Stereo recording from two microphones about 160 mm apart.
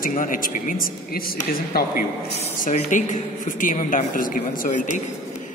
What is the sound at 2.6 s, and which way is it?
A woman's voice, 55° left (ahead or behind).